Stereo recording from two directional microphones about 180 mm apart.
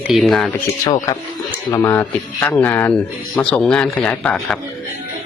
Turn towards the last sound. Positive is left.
turn(degrees=5)  # may be behind; listen again after turning